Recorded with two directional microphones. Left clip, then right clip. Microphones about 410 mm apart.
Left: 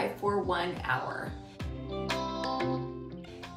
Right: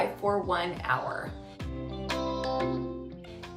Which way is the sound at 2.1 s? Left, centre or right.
Centre.